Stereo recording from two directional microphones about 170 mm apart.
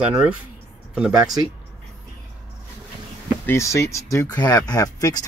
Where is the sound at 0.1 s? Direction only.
10° right (ahead or behind).